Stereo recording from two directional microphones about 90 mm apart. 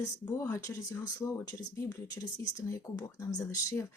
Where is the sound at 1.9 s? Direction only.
40° left (ahead or behind).